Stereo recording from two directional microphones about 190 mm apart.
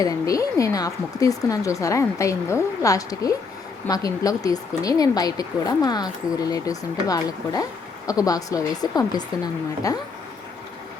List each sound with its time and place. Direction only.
0.0 s a woman's voice: 20° left (ahead or behind)